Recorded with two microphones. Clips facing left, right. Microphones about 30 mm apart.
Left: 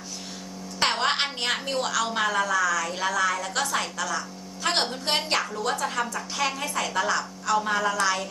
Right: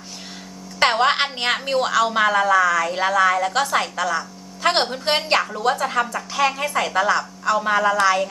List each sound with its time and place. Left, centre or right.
0.8 s a sound: centre
1.4 s a woman's voice: right
6.3 s a woman's voice: centre
6.6 s a woman's voice: right